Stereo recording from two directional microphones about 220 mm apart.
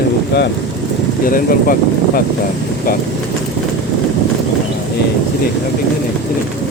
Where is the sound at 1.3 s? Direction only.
40° left (ahead or behind).